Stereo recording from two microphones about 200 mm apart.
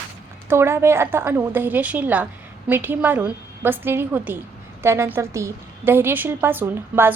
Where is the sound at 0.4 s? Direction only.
15° right (ahead or behind).